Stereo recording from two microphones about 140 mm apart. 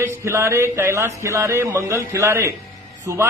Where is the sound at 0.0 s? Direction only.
20° right (ahead or behind).